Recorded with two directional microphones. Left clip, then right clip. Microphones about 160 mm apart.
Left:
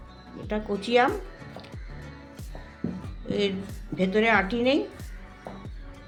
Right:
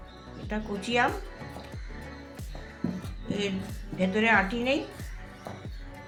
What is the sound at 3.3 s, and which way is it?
Speech, 90° left.